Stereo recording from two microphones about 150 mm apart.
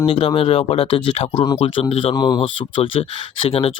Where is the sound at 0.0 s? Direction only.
40° left (ahead or behind).